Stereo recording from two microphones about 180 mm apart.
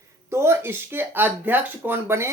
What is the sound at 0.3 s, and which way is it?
Speech, 15° right (ahead or behind).